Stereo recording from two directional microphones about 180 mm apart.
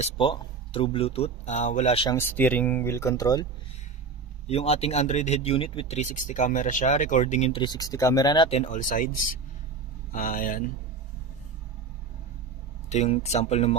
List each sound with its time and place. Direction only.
0.0 s speech: 30° left (ahead or behind)
2.0 s speech: 15° left (ahead or behind)
4.5 s speech: 35° left (ahead or behind)
7.6 s speech: 20° left (ahead or behind)
8.5 s speech: 40° left (ahead or behind)
12.9 s speech: 35° left (ahead or behind)